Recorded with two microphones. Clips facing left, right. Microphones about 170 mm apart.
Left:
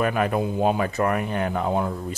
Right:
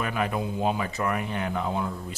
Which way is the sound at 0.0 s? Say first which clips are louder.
Left 6 dB; 50° left (ahead or behind).